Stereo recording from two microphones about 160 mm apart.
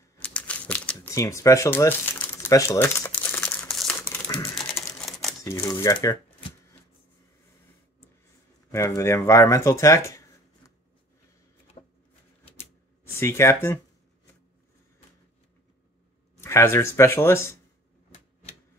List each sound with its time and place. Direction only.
0.2 s crumpling: 10° left (ahead or behind)
1.1 s speech: 20° left (ahead or behind)
3.6 s crumpling: 5° left (ahead or behind)
4.6 s typing: centre (ahead or behind)
5.4 s speech: 20° left (ahead or behind)
8.7 s speech: 15° left (ahead or behind)
13.0 s speech: 15° left (ahead or behind)
16.3 s speech: 15° left (ahead or behind)